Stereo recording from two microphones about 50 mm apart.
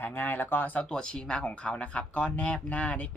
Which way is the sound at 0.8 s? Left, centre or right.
Centre.